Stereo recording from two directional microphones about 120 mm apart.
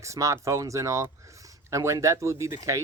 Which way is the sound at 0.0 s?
25° right (ahead or behind).